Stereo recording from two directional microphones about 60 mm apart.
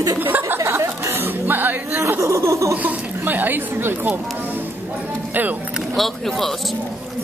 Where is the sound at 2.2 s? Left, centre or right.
Right.